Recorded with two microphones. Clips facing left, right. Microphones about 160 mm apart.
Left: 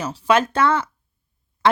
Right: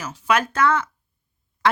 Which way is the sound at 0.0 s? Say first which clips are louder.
Left 3 dB; 30° left (ahead or behind).